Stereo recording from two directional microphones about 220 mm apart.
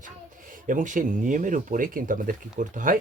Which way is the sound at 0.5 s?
35° right (ahead or behind).